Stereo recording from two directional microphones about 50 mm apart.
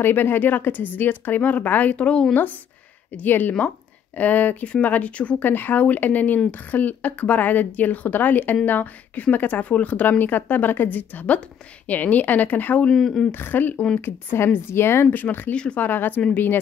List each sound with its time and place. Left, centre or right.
0.0 s a woman's voice: left
3.2 s a woman's voice: left
5.4 s a woman's voice: left
12.9 s speech: centre
13.3 s a woman's voice: left
14.0 s a woman's voice: left
15.0 s a woman's voice: left
15.5 s speech: left
15.8 s a woman's voice: left